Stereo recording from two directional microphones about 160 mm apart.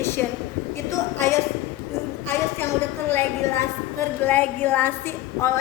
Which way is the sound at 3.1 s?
15° left (ahead or behind).